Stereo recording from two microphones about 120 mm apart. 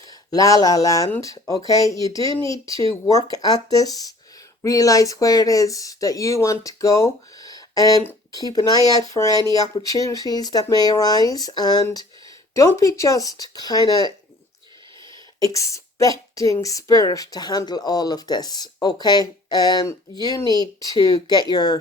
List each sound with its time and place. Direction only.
0.3 s a woman's voice: 30° left (ahead or behind)
15.4 s a woman's voice: 25° left (ahead or behind)